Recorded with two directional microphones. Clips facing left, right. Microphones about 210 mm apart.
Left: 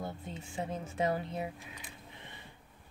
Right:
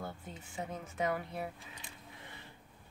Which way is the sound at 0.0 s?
30° left (ahead or behind).